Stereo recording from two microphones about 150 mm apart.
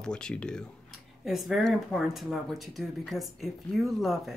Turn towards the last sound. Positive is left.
turn(degrees=0)  # may be behind; listen again after turning